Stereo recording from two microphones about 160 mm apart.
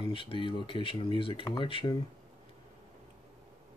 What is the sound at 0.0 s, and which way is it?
Speech, 35° left (ahead or behind).